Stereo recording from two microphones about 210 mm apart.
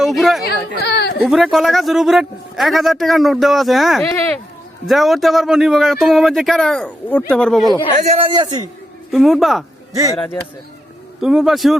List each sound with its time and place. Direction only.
0.0 s a sound: centre (ahead or behind)
0.8 s a sound: 50° left (ahead or behind)
1.2 s speech: centre (ahead or behind)
4.0 s speech: 10° left (ahead or behind)
4.9 s speech: centre (ahead or behind)
7.9 s speech: 30° right (ahead or behind)
9.1 s speech: centre (ahead or behind)
10.1 s speech: 15° left (ahead or behind)
11.2 s speech: centre (ahead or behind)